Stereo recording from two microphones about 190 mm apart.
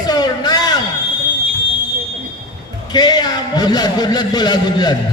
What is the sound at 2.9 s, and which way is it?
A man's voice, 20° left (ahead or behind).